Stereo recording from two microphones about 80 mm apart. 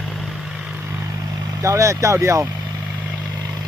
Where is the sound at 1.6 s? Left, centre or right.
Right.